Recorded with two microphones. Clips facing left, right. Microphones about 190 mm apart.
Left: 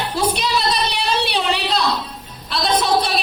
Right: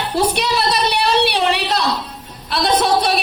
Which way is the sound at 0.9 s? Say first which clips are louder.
Right 4 dB; 65° right (ahead or behind).